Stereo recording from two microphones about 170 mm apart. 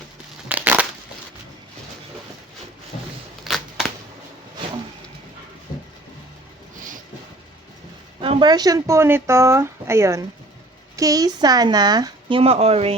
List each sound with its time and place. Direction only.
0.4 s crushing: 10° right (ahead or behind)
3.4 s a sound: centre (ahead or behind)
8.2 s speech: 30° right (ahead or behind)
12.4 s speech: 35° right (ahead or behind)